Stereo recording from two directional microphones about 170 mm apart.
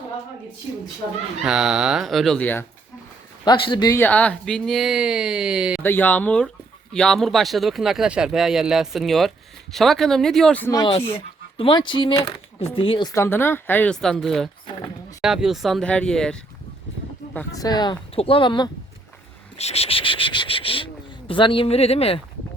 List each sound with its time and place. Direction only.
1.5 s speech: 5° right (ahead or behind)
3.4 s speech: 25° left (ahead or behind)
3.9 s speech: 10° left (ahead or behind)
5.8 s speech: 10° left (ahead or behind)
10.7 s speech: 25° left (ahead or behind); by 16.4 s 5° left (ahead or behind)
17.5 s speech: 20° left (ahead or behind)